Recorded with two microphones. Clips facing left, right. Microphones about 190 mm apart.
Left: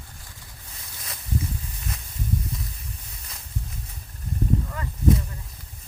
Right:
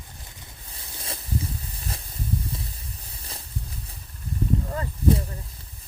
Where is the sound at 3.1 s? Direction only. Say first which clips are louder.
Right 3 dB; 30° right (ahead or behind).